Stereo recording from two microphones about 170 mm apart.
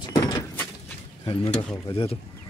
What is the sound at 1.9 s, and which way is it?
Speech, 30° left (ahead or behind).